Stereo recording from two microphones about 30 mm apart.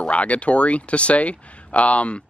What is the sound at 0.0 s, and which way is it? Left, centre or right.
Speech, left.